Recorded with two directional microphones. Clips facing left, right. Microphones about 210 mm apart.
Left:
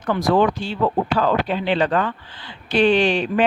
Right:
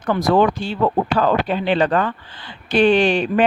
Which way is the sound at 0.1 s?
45° right (ahead or behind).